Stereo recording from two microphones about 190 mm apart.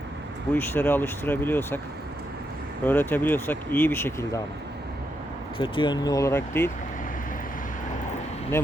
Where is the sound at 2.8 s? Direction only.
10° left (ahead or behind).